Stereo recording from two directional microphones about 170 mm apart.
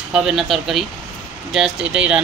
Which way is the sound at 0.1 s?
5° right (ahead or behind).